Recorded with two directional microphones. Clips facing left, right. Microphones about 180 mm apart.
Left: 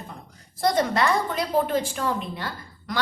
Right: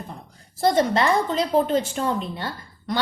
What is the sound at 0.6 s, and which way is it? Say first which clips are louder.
A woman's voice: right 3 dB; 25° right (ahead or behind).